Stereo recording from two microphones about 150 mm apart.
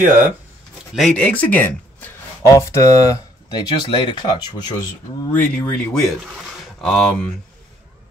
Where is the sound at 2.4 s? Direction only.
20° left (ahead or behind).